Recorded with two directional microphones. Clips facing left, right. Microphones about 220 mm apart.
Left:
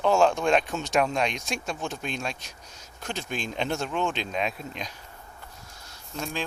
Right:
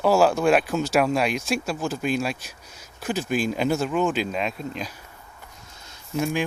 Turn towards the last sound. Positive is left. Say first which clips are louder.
# right 8 dB
turn(degrees=-10)  # may be behind; listen again after turning